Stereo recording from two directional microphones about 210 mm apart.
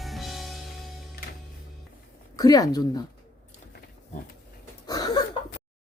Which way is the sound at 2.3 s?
15° left (ahead or behind).